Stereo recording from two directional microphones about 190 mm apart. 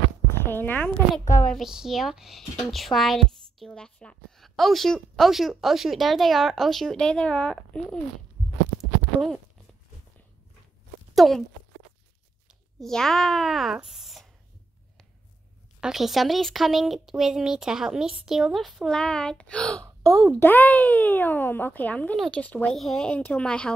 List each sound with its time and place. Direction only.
0.5 s a child's voice: 10° left (ahead or behind)
11.1 s speech: centre (ahead or behind)
12.8 s a woman's voice: centre (ahead or behind)
15.8 s a woman's voice: centre (ahead or behind)
19.8 s speech: 15° right (ahead or behind)
20.3 s a child's voice: 10° left (ahead or behind)